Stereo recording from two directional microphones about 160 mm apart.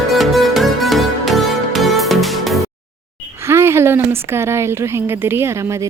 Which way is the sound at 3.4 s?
15° right (ahead or behind).